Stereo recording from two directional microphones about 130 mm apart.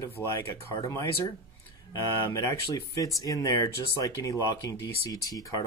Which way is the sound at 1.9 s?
25° left (ahead or behind).